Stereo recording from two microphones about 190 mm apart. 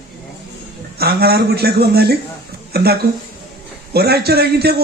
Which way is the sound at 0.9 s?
55° right (ahead or behind).